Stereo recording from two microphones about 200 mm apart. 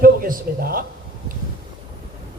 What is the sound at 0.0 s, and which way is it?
Speech, 45° right (ahead or behind).